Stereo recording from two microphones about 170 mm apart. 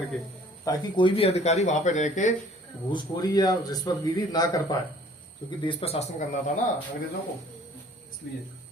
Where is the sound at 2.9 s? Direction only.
25° left (ahead or behind).